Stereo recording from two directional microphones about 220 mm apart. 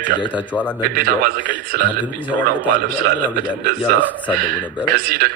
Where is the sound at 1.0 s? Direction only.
40° right (ahead or behind).